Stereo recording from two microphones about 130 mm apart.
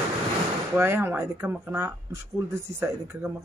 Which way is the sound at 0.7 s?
15° right (ahead or behind).